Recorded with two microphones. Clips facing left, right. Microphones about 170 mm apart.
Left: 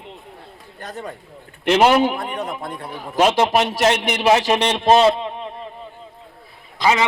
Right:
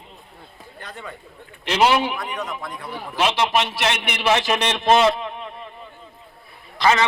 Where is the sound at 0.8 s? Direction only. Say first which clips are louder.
Left 5 dB; 40° left (ahead or behind).